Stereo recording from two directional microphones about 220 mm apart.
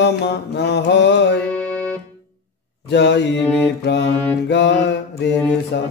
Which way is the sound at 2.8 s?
50° left (ahead or behind).